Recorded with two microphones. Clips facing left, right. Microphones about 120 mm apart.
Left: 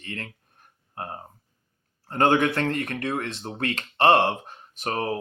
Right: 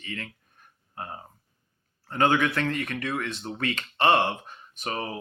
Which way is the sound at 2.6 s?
45° left (ahead or behind).